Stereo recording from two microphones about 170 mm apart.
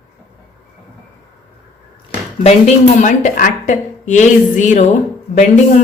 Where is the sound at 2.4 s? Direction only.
45° left (ahead or behind).